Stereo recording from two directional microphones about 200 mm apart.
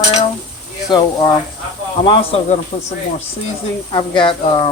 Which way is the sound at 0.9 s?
20° left (ahead or behind).